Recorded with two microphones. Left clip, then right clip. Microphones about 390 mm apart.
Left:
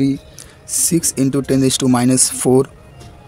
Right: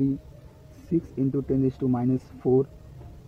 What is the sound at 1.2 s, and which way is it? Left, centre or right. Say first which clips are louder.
Speech: left 10 dB; right.